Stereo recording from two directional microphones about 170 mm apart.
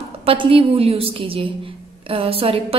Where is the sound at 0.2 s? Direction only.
30° right (ahead or behind).